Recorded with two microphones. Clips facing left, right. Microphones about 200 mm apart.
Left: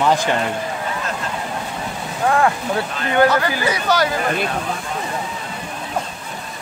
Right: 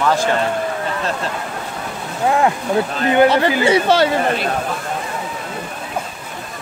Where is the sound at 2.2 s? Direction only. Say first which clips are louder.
Right 1 dB; 20° right (ahead or behind).